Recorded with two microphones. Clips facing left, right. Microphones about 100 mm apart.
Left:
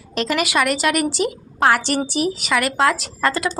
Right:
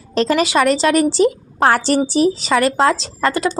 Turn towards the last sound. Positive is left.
turn(degrees=-30)  # may be behind; listen again after turning